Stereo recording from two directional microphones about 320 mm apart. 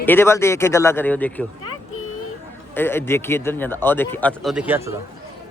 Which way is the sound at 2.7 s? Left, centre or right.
Centre.